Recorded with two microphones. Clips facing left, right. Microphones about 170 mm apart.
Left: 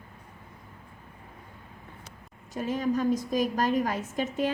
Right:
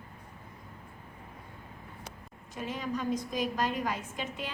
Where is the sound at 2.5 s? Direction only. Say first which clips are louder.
Left 7 dB; 45° left (ahead or behind).